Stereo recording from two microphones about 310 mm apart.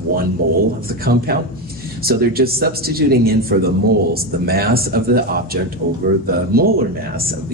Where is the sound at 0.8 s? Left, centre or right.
Right.